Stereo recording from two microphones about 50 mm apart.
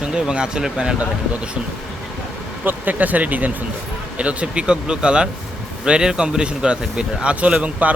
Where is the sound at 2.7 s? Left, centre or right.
Right.